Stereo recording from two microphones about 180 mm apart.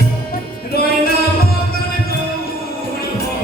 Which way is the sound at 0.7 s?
60° left (ahead or behind).